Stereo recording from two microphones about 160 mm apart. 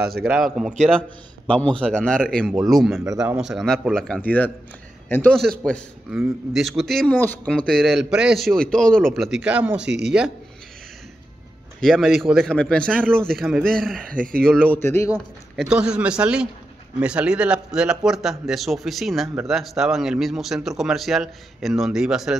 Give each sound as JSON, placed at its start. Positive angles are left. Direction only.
{"t": 0.2, "sound": "speech", "side_deg": -5}
{"t": 1.8, "sound": "a man's voice", "side_deg": 5}
{"t": 9.8, "sound": "speech", "side_deg": -90}
{"t": 11.8, "sound": "a man's voice", "side_deg": 0}
{"t": 14.1, "sound": "speech", "side_deg": -60}
{"t": 14.4, "sound": "a man's voice", "side_deg": 5}
{"t": 15.5, "sound": "speech", "side_deg": 0}